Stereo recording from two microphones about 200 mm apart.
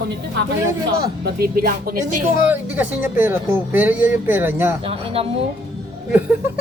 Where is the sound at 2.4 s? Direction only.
10° right (ahead or behind).